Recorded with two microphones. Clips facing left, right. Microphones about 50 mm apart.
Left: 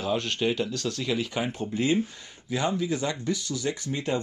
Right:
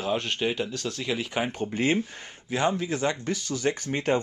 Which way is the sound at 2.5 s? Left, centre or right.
Right.